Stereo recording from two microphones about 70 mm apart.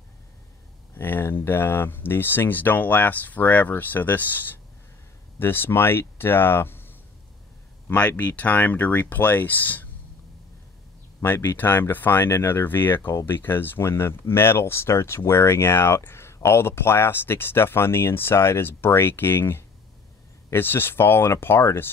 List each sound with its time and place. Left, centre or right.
0.9 s speech: left
7.9 s speech: left
11.2 s speech: left